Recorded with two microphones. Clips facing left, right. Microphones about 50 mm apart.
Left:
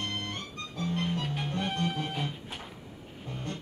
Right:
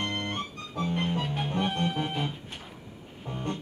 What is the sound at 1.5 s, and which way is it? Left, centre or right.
Music, right.